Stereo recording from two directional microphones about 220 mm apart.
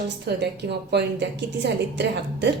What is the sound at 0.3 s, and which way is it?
A woman's voice, 50° right (ahead or behind).